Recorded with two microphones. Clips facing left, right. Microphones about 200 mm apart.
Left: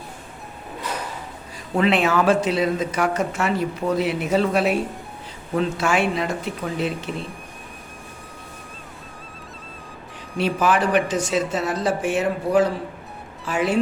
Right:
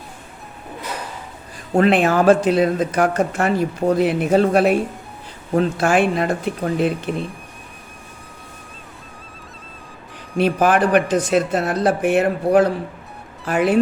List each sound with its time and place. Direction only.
1.7 s speech: 50° right (ahead or behind)
10.3 s speech: 55° right (ahead or behind)